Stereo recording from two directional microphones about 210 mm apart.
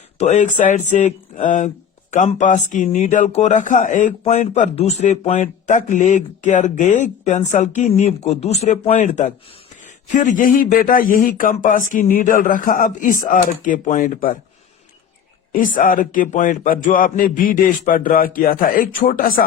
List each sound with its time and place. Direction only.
0.2 s speech: 35° left (ahead or behind)
15.5 s speech: 40° left (ahead or behind)